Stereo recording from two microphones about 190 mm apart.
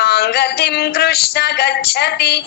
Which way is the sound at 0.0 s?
55° left (ahead or behind).